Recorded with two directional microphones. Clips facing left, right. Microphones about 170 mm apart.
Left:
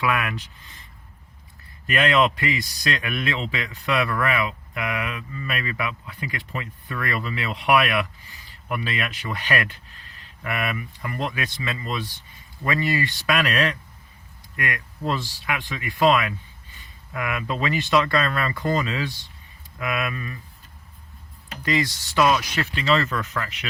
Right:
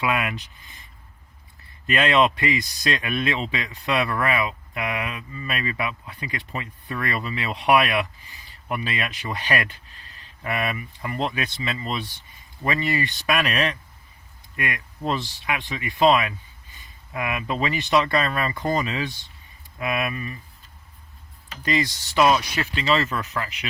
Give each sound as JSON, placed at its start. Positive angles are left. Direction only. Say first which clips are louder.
{"t": 0.0, "sound": "a man's voice", "louder": "even", "side_deg": -20}
{"t": 1.9, "sound": "a man's voice", "louder": "even", "side_deg": -25}
{"t": 21.6, "sound": "a man's voice", "louder": "even", "side_deg": -20}